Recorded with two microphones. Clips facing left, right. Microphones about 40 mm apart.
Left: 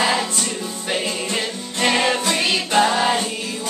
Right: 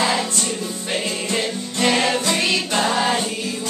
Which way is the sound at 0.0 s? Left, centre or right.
Centre.